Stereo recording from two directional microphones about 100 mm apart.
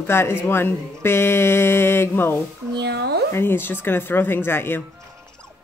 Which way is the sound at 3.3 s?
20° left (ahead or behind).